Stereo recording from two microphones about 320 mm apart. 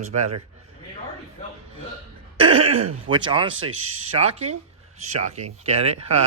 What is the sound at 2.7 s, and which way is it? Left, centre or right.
Speech, right.